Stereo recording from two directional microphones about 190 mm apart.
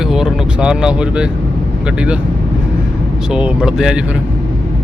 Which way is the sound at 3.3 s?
5° right (ahead or behind).